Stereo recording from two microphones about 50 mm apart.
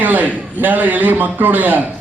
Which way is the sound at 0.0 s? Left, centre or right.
Right.